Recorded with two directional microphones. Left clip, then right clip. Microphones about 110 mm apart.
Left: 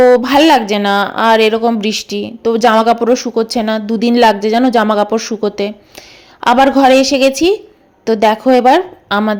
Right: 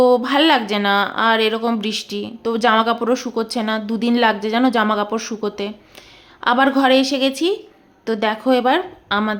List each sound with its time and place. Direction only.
0.1 s a woman's voice: 40° left (ahead or behind)
9.0 s speech: 50° left (ahead or behind)